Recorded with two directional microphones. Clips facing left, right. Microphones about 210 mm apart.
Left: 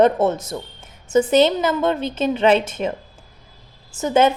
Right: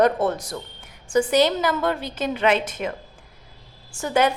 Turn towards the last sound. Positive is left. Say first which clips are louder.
# left 4 dB
turn(degrees=25)  # may be behind; listen again after turning